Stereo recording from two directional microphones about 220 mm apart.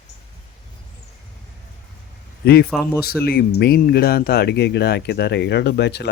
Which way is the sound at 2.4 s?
45° left (ahead or behind).